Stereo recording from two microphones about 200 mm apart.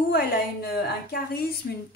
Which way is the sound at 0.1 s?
50° left (ahead or behind).